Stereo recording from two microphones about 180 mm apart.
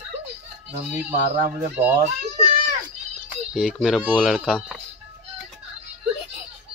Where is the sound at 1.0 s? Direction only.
45° right (ahead or behind).